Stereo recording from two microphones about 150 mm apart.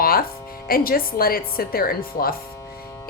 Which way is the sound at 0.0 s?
75° left (ahead or behind).